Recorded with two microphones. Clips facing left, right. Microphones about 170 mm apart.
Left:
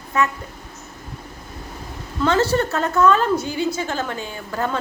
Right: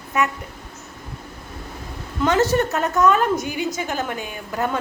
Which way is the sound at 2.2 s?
15° right (ahead or behind).